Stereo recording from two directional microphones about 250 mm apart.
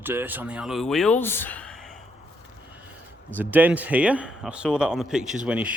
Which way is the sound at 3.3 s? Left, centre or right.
Centre.